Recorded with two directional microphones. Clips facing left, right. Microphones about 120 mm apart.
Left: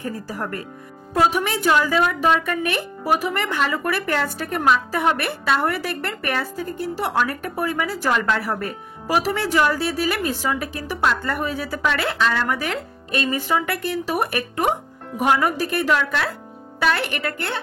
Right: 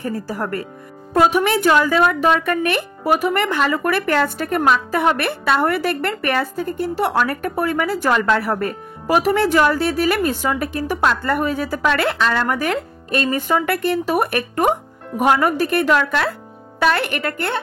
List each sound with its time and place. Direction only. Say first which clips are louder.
1.1 s a woman's voice: right 4 dB; 65° right (ahead or behind)